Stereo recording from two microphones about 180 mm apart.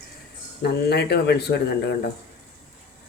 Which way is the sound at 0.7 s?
65° left (ahead or behind).